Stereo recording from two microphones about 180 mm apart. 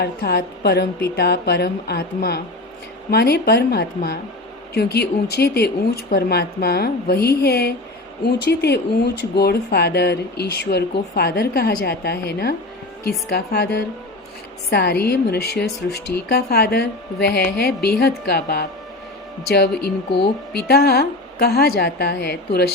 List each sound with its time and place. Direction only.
0.0 s speech: 60° left (ahead or behind)